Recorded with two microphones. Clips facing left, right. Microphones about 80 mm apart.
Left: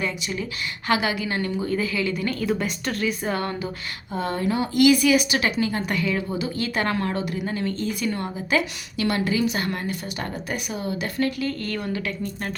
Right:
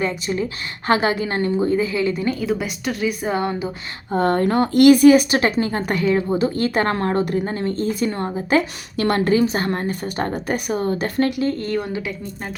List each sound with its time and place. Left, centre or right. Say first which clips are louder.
0.0 s a woman's voice: right 6 dB; right
2.4 s speech: right 2 dB; centre
4.1 s speech: right 7 dB; right
11.3 s a woman's voice: right 6 dB; right